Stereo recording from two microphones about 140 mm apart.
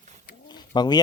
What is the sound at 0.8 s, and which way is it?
Speech, 30° left (ahead or behind).